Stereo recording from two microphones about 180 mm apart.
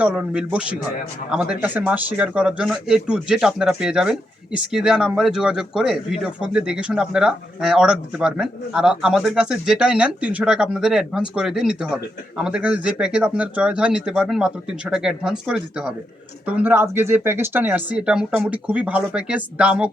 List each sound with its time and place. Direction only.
0.0 s speech: 5° right (ahead or behind)